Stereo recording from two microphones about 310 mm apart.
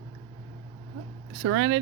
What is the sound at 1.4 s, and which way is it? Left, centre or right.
Speech, right.